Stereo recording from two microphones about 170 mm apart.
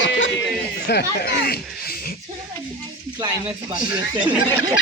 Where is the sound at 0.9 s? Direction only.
70° left (ahead or behind).